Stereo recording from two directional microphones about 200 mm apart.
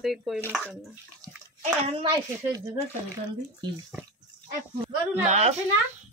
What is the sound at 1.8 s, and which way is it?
Speech, 25° right (ahead or behind).